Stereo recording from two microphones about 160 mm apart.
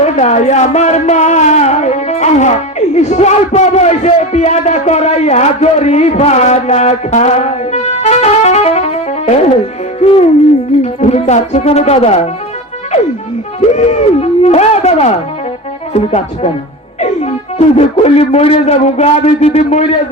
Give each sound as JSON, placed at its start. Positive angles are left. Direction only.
{"t": 0.0, "sound": "a man's voice", "side_deg": 45}
{"t": 13.6, "sound": "a man's voice", "side_deg": 45}